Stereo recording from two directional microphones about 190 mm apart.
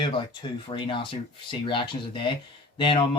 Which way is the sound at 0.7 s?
25° left (ahead or behind).